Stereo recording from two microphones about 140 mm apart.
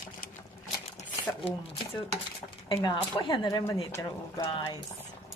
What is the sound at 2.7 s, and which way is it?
Speech, 35° left (ahead or behind).